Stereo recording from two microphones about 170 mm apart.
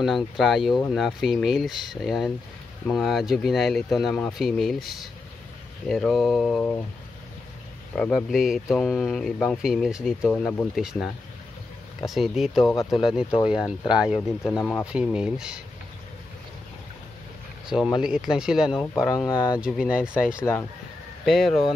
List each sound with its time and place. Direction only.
0.0 s speech: centre (ahead or behind)
7.9 s speech: 5° left (ahead or behind)
10.2 s speech: 10° left (ahead or behind)
10.8 s speech: 5° right (ahead or behind)
14.6 s speech: 10° left (ahead or behind)
15.1 s speech: 5° right (ahead or behind)
17.6 s speech: 5° right (ahead or behind)
19.2 s speech: 20° left (ahead or behind)
19.6 s speech: 5° right (ahead or behind)